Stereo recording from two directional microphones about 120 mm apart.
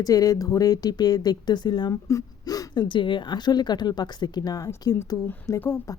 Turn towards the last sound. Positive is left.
turn(degrees=20)  # may be behind; listen again after turning